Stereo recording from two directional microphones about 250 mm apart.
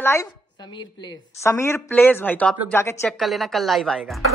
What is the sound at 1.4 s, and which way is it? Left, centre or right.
Speech, centre.